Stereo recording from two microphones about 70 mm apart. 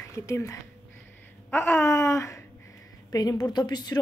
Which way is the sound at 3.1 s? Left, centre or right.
Left.